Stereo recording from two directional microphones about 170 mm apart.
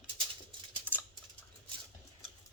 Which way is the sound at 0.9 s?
10° left (ahead or behind).